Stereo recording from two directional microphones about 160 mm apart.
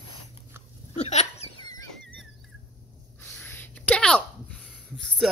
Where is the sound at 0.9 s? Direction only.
45° left (ahead or behind).